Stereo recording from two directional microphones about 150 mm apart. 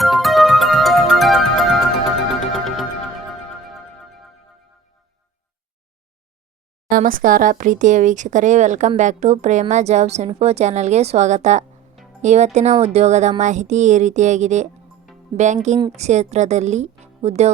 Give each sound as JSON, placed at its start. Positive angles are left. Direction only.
{"t": 0.0, "sound": "music", "side_deg": 0}
{"t": 6.9, "sound": "speech", "side_deg": -65}
{"t": 15.9, "sound": "speech", "side_deg": -50}